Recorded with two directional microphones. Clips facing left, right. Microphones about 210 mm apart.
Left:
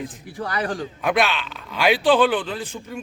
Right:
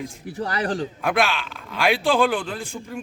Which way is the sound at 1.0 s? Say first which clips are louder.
Left 2 dB; centre (ahead or behind).